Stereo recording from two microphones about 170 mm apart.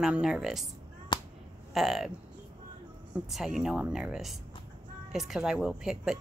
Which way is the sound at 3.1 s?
5° right (ahead or behind).